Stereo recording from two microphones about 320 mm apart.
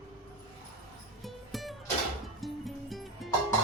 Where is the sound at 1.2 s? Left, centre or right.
Centre.